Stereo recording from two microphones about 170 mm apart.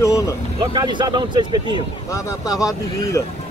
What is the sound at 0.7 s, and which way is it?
Speech, 25° right (ahead or behind).